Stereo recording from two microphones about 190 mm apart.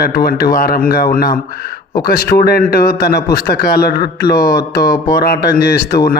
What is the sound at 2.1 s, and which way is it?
A man's voice, 55° left (ahead or behind).